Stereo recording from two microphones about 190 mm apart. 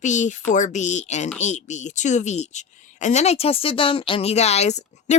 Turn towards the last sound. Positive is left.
turn(degrees=35)  # may be behind; listen again after turning